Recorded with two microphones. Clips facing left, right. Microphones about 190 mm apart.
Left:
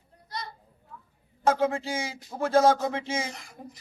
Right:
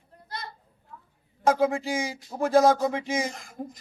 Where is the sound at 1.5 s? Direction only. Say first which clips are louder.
Right 2 dB; 10° right (ahead or behind).